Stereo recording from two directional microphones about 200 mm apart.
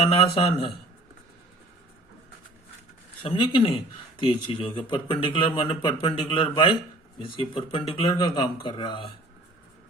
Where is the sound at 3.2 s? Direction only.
25° left (ahead or behind).